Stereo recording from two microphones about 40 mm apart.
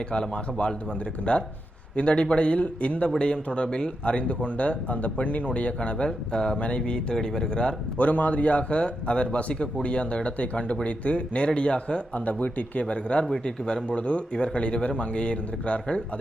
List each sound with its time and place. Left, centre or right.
0.1 s speech: left
3.2 s speech: left
6.3 s speech: centre
7.9 s speech: left
13.4 s speech: left
13.8 s speech: left